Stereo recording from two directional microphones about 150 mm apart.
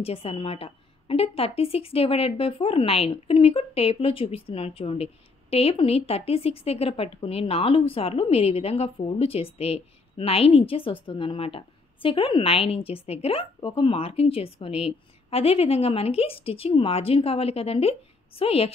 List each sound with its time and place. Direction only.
0.0 s a woman's voice: 40° left (ahead or behind)